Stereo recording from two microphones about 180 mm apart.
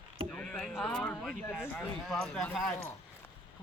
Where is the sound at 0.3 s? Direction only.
5° left (ahead or behind).